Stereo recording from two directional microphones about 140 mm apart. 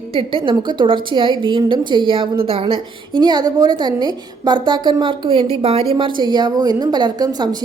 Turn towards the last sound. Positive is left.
turn(degrees=-30)  # may be behind; listen again after turning